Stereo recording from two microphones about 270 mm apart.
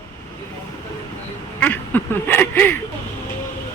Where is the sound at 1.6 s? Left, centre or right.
Centre.